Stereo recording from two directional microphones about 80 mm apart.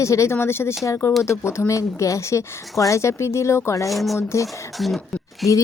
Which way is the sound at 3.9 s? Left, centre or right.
Centre.